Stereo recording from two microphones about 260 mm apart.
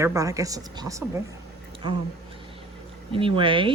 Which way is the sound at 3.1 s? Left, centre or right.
Centre.